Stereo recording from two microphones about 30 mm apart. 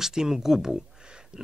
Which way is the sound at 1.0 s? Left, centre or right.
Right.